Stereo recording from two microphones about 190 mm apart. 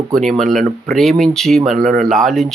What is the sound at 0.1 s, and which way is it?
Speech, centre (ahead or behind).